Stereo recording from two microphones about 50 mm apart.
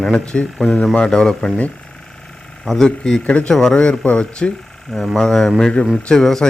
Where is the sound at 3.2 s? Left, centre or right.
Left.